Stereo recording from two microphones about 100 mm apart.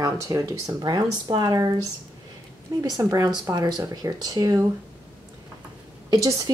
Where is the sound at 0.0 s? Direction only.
35° right (ahead or behind).